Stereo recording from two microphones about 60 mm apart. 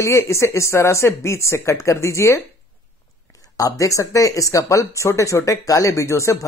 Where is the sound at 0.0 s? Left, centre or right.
Left.